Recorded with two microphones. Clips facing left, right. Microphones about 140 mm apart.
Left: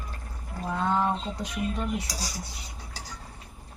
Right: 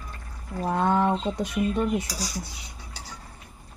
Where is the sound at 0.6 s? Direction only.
55° right (ahead or behind).